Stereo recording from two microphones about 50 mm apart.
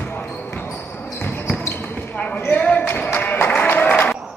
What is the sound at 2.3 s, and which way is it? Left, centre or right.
Basketball bounce, left.